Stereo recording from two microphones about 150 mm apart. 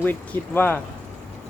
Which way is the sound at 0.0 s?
10° left (ahead or behind).